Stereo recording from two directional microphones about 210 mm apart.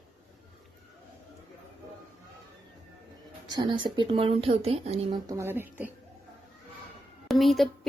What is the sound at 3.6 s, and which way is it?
Speech, 25° right (ahead or behind).